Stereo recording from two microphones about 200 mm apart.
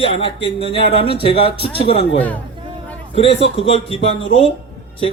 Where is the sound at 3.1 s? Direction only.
25° left (ahead or behind).